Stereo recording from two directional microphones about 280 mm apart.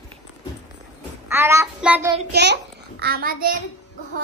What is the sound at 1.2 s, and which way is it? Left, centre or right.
Child singing, centre.